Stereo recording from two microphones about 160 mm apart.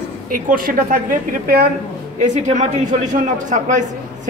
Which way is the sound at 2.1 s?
50° right (ahead or behind).